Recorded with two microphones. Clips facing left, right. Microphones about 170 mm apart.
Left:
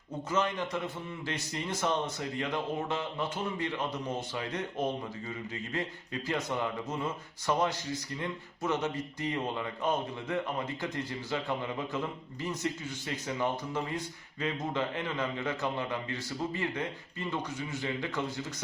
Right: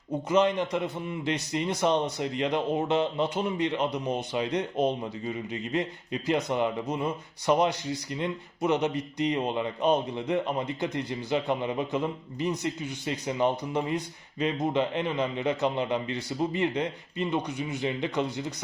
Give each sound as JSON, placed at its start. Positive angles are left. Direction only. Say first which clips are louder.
{"t": 0.3, "sound": "speech", "louder": "right 7 dB", "side_deg": -20}